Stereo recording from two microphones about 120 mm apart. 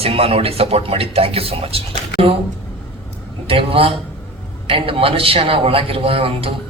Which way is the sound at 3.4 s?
50° right (ahead or behind).